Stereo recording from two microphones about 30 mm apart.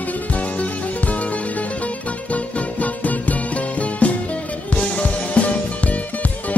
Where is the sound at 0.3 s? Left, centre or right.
Left.